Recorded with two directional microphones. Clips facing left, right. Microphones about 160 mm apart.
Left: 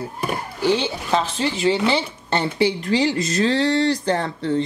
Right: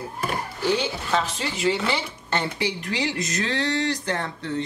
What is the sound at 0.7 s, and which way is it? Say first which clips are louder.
A woman's voice: left 3 dB; 30° left (ahead or behind).